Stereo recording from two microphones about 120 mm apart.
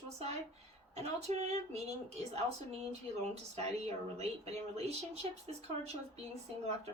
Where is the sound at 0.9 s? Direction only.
60° right (ahead or behind).